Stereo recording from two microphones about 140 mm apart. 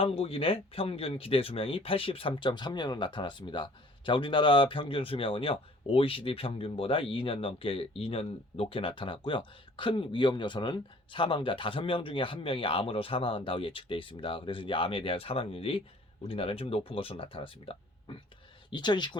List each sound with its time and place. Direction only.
0.0 s speech: 45° left (ahead or behind)